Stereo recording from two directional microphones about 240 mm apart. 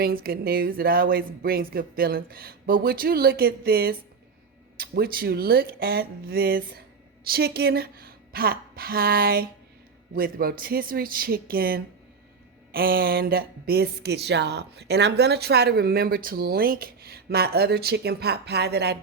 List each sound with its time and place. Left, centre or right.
0.0 s speech: right